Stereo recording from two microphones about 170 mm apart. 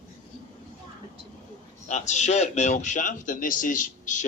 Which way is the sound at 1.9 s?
45° left (ahead or behind).